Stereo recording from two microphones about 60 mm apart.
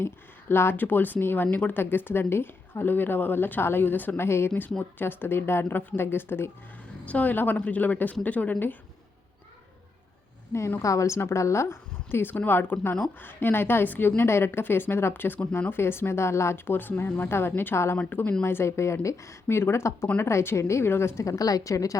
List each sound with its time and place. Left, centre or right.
0.0 s speech: left
4.2 s a woman's voice: left
7.1 s speech: left
10.8 s a woman's voice: left
14.2 s a woman's voice: left
18.4 s a woman's voice: left
21.2 s a woman's voice: left